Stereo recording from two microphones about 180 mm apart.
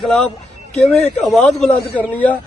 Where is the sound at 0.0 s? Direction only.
Centre (ahead or behind).